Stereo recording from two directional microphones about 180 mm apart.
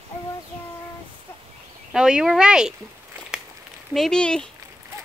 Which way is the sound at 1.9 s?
5° right (ahead or behind).